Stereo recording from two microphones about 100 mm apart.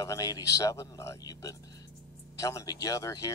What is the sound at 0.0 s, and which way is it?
Speech, 35° left (ahead or behind).